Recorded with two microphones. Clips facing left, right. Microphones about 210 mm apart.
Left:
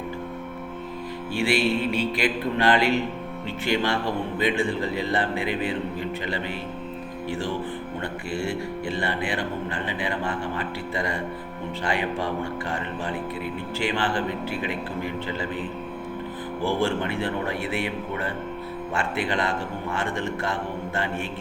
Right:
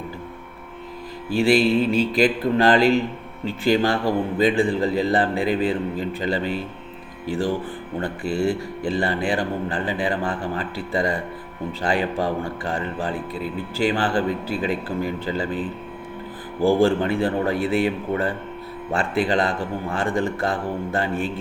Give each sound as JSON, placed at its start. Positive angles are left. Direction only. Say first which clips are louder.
{"t": 1.4, "sound": "a man's voice", "louder": "right 6 dB", "side_deg": -40}
{"t": 16.8, "sound": "a man's voice", "louder": "right 6 dB", "side_deg": -35}